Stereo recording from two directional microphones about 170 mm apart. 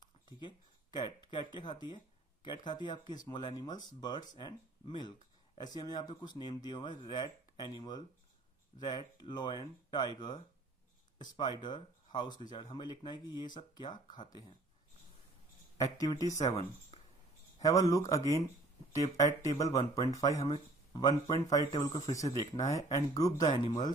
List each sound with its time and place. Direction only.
0.4 s speech: 25° left (ahead or behind)
15.8 s speech: 20° left (ahead or behind)
16.3 s speech: 40° left (ahead or behind)
17.6 s speech: 20° left (ahead or behind)